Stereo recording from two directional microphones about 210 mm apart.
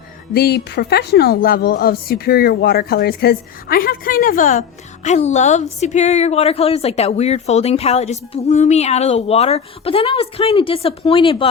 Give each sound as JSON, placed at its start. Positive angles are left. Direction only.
{"t": 0.3, "sound": "a woman's voice", "side_deg": 50}